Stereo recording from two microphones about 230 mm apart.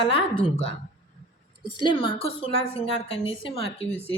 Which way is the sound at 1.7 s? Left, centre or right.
Centre.